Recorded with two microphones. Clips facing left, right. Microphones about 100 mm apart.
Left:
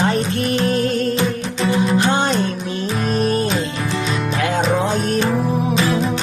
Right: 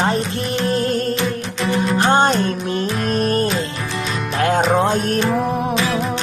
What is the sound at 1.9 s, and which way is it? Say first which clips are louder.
Music: right 2 dB; 45° right (ahead or behind).